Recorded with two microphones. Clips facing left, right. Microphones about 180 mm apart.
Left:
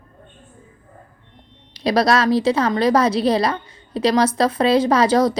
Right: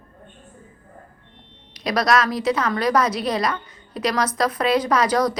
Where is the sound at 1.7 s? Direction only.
30° left (ahead or behind).